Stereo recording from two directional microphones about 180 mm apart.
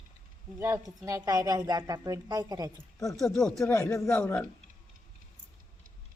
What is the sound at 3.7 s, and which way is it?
Speech, 15° left (ahead or behind).